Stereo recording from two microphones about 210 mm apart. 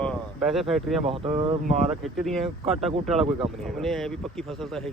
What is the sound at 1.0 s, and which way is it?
Speech, 25° right (ahead or behind).